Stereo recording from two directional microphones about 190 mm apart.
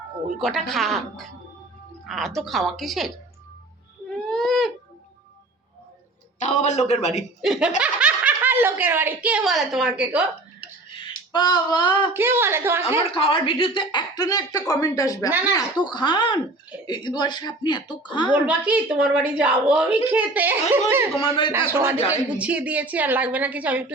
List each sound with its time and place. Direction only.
0.3 s a woman's voice: centre (ahead or behind)
4.3 s a sound: centre (ahead or behind)
6.4 s a man's voice: 40° left (ahead or behind)
7.4 s a woman's voice: centre (ahead or behind)
10.6 s a sound: 25° left (ahead or behind)
12.1 s a woman's voice: 10° right (ahead or behind)
13.1 s a woman's voice: 30° left (ahead or behind)
18.4 s a woman's voice: 5° right (ahead or behind)
21.2 s a woman's voice: 25° left (ahead or behind)
21.5 s a woman's voice: 15° right (ahead or behind)